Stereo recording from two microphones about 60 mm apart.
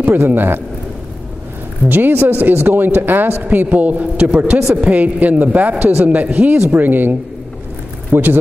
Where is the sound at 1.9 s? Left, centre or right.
Right.